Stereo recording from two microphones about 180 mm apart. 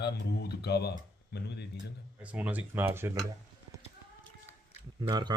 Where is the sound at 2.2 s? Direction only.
5° right (ahead or behind).